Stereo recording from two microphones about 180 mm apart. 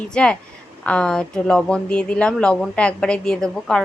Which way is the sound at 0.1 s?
5° left (ahead or behind).